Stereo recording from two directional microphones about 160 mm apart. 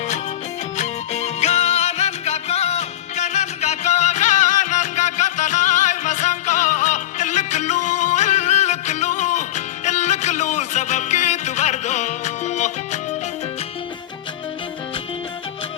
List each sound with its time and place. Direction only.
0.8 s music: 45° left (ahead or behind)